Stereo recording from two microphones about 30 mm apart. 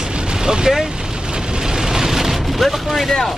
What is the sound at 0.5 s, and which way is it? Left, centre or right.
Speech, centre.